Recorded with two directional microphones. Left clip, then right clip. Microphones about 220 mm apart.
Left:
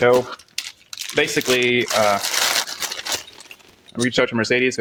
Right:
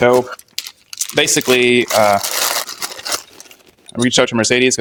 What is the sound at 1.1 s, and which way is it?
Speech, 40° right (ahead or behind).